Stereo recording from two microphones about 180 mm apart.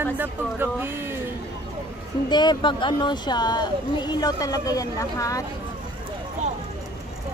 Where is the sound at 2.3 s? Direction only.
25° left (ahead or behind).